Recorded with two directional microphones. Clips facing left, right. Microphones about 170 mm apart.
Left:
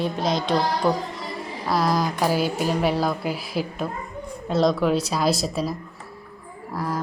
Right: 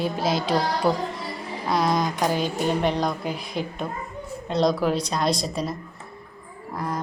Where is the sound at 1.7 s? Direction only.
Centre (ahead or behind).